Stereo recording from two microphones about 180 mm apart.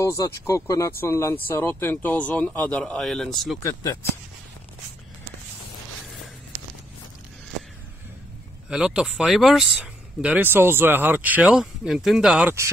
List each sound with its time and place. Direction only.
0.0 s speech: 15° left (ahead or behind)
3.5 s speech: 20° left (ahead or behind)
8.6 s speech: 5° right (ahead or behind)